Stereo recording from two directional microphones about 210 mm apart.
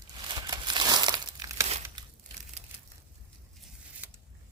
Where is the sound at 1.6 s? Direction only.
30° right (ahead or behind).